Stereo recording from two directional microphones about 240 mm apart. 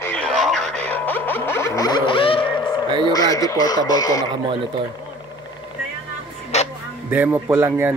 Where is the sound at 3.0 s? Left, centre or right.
Centre.